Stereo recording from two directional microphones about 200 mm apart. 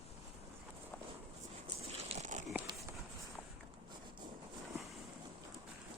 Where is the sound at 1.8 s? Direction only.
30° right (ahead or behind).